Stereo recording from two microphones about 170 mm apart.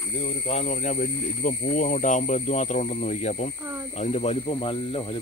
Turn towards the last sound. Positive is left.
turn(degrees=35)  # may be behind; listen again after turning